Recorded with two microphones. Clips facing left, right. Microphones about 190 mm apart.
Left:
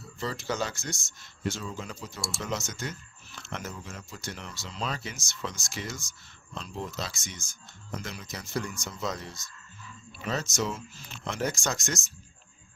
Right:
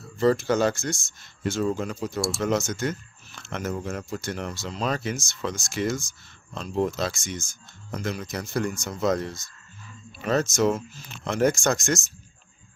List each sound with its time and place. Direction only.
0.2 s speech: 55° right (ahead or behind)